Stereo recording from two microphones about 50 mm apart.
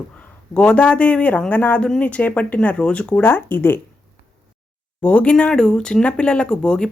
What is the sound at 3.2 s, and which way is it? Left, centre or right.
Speech, left.